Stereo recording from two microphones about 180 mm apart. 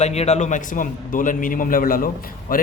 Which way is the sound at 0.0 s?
35° left (ahead or behind).